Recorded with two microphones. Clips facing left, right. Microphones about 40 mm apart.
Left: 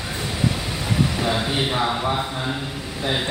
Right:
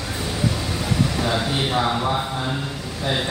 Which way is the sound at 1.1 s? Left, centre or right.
Centre.